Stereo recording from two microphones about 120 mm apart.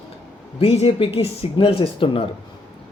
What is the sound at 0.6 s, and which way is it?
Speech, 55° left (ahead or behind).